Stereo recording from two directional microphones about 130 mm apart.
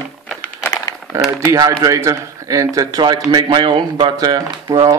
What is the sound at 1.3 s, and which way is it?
Speech, 25° right (ahead or behind).